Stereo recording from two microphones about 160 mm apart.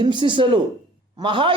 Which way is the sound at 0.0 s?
30° right (ahead or behind).